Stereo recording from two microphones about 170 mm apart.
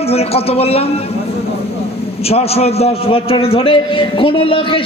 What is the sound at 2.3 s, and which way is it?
A man's voice, 35° left (ahead or behind).